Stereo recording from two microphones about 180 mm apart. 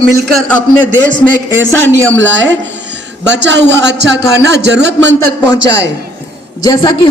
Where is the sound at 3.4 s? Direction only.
75° right (ahead or behind).